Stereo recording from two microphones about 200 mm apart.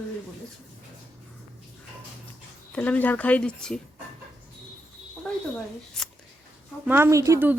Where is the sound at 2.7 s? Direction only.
10° left (ahead or behind).